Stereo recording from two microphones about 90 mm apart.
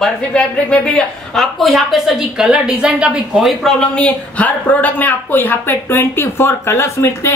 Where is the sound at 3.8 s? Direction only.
15° left (ahead or behind).